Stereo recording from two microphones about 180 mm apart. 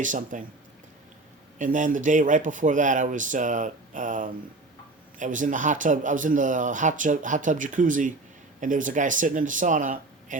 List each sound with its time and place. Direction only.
0.0 s speech: 45° right (ahead or behind)
1.5 s speech: 45° right (ahead or behind)